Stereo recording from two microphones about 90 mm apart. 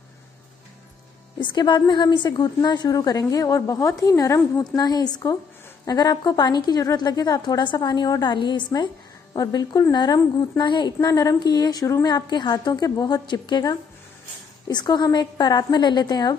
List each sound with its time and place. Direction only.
1.4 s a woman's voice: 60° left (ahead or behind)
10.6 s a woman's voice: 55° left (ahead or behind)
11.1 s a woman's voice: 40° left (ahead or behind)